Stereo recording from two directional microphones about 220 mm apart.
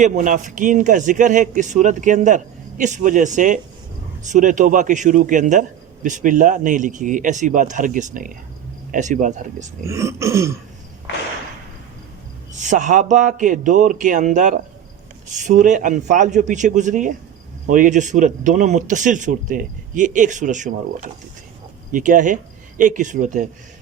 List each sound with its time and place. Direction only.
0.0 s a man's voice: 35° right (ahead or behind)
9.8 s throat clearing: 15° right (ahead or behind)
12.5 s a man's voice: 35° right (ahead or behind)